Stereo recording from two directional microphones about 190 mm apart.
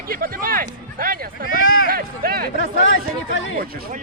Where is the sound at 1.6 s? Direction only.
90° left.